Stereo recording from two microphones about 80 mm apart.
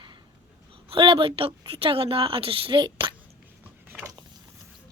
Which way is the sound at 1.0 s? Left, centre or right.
Right.